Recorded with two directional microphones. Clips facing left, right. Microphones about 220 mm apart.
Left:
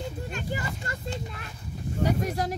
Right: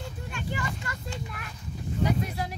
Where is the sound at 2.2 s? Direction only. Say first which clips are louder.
Left 4 dB; 45° left (ahead or behind).